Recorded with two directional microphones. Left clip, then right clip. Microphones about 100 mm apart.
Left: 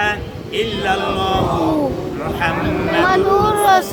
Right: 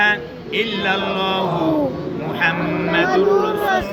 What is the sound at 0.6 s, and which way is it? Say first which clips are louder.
Speech: left 1 dB; 15° left (ahead or behind).